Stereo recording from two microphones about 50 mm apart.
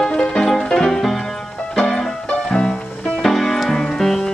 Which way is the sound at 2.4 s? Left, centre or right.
Centre.